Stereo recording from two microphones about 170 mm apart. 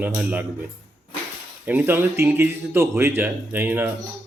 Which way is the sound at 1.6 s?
10° right (ahead or behind).